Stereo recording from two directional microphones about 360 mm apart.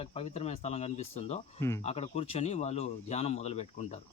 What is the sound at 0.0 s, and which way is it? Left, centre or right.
Speech, centre.